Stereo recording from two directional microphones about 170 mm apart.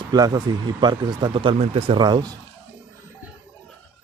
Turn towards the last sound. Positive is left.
turn(degrees=-25)  # may be behind; listen again after turning